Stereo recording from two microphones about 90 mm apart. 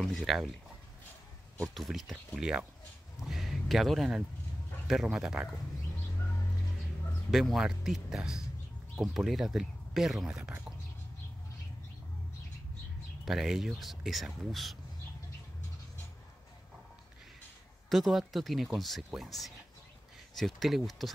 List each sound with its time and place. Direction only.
0.0 s speech: centre (ahead or behind)
1.7 s speech: centre (ahead or behind)
7.2 s speech: centre (ahead or behind)
13.2 s speech: 5° right (ahead or behind)
17.8 s speech: centre (ahead or behind)